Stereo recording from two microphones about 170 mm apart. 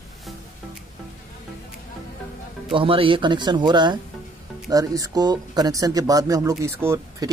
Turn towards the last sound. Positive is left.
turn(degrees=-15)  # may be behind; listen again after turning